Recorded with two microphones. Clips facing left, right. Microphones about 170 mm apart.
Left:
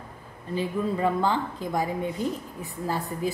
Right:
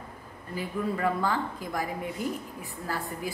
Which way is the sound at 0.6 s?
25° left (ahead or behind).